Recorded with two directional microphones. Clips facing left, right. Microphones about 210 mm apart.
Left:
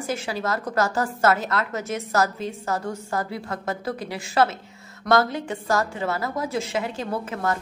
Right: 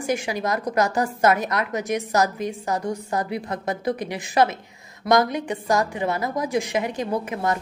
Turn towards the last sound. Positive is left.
turn(degrees=-15)  # may be behind; listen again after turning